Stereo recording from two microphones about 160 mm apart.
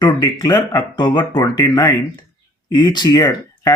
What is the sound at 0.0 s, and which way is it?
Speech, 25° left (ahead or behind).